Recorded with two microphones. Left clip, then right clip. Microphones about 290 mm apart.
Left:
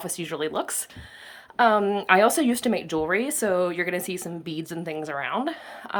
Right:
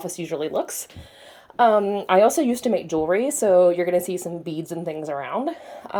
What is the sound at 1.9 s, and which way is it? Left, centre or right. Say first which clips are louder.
Speech: right 2 dB; left.